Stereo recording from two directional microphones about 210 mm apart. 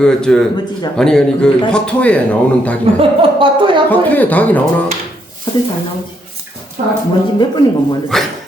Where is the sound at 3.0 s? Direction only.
25° right (ahead or behind).